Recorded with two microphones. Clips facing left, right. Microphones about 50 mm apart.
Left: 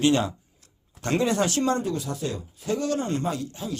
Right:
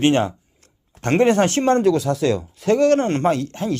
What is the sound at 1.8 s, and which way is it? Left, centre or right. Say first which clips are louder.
Speech: right 12 dB; right.